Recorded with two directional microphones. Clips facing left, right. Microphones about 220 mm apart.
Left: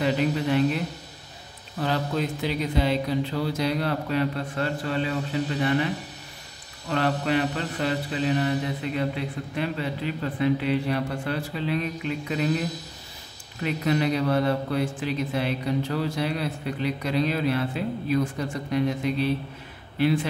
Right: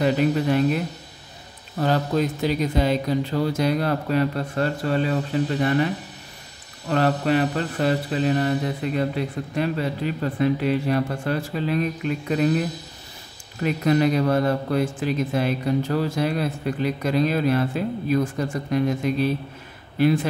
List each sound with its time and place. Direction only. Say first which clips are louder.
0.0 s a man's voice: right 4 dB; 45° right (ahead or behind)
1.8 s a man's voice: right 5 dB; 45° right (ahead or behind)
6.9 s a man's voice: right 4 dB; 45° right (ahead or behind)
13.6 s a man's voice: right 4 dB; 45° right (ahead or behind)